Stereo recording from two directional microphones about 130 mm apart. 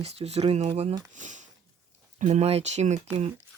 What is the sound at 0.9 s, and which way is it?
Speech, 70° right (ahead or behind).